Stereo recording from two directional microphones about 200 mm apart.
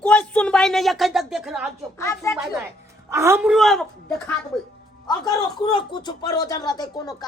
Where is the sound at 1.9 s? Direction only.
15° left (ahead or behind).